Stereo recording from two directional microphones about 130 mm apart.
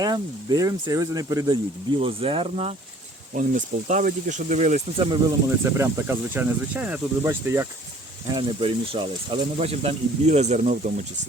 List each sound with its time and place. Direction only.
0.0 s speech: 30° right (ahead or behind)
2.0 s speech: 45° right (ahead or behind)
3.3 s speech: 80° right
5.6 s speech: 20° right (ahead or behind)
8.3 s speech: 40° right (ahead or behind); by 11.0 s 70° right (ahead or behind)